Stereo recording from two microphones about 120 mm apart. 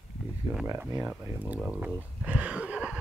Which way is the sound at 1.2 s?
20° right (ahead or behind).